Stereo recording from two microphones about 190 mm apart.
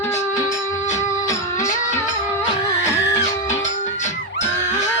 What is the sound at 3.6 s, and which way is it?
Music, 40° left (ahead or behind).